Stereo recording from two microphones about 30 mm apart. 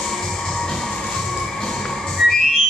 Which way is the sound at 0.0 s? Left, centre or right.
Centre.